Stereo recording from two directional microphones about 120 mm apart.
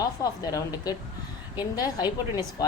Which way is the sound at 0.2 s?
30° left (ahead or behind).